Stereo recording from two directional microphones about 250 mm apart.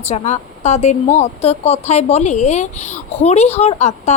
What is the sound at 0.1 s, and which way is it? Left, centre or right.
Speech, left.